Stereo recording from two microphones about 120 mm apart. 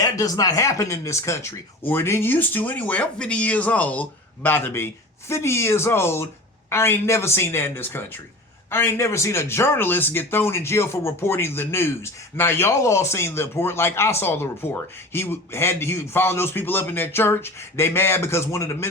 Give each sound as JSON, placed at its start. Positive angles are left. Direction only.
{"t": 0.0, "sound": "speech", "side_deg": 30}